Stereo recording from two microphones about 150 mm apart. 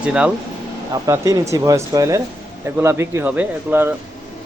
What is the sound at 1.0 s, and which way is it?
Speech, 20° right (ahead or behind).